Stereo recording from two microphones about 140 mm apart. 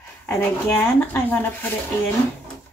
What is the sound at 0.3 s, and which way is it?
Speech, 15° left (ahead or behind).